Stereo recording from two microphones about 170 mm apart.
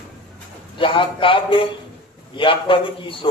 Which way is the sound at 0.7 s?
30° left (ahead or behind).